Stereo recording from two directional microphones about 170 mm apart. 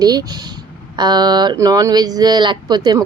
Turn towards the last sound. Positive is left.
turn(degrees=-25)  # may be behind; listen again after turning